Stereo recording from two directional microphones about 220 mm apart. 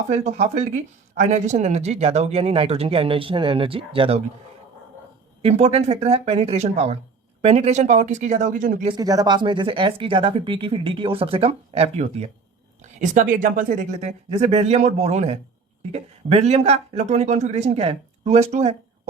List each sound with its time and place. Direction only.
0.1 s speech: 30° right (ahead or behind)
5.4 s speech: 30° right (ahead or behind)
8.9 s speech: 15° right (ahead or behind)